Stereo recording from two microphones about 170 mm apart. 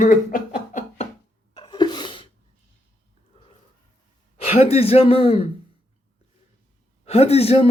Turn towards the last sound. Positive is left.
turn(degrees=35)  # may be behind; listen again after turning